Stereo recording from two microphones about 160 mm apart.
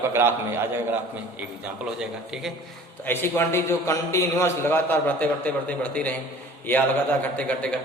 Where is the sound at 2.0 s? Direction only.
5° right (ahead or behind).